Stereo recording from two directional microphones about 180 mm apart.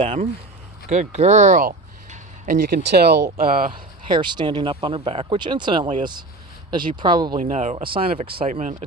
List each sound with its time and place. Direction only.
0.0 s speech: 40° right (ahead or behind)
2.8 s speech: 65° right (ahead or behind)
3.3 s speech: 50° right (ahead or behind)
4.0 s speech: 25° right (ahead or behind)
7.3 s speech: 45° right (ahead or behind)
7.9 s speech: 30° right (ahead or behind)
8.4 s speech: 45° right (ahead or behind)